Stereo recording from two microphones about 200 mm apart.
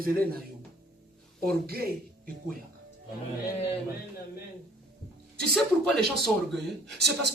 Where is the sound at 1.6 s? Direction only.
50° right (ahead or behind).